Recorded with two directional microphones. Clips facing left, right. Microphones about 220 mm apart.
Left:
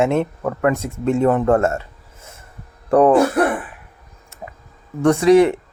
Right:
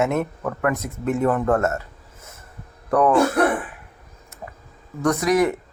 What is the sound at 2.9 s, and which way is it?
Speech, 30° left (ahead or behind).